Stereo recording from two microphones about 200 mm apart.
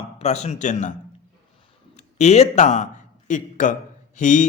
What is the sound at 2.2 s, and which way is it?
A man's voice, 35° left (ahead or behind).